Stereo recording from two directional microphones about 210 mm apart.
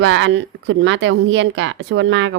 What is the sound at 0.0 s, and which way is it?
Speech, 65° right (ahead or behind).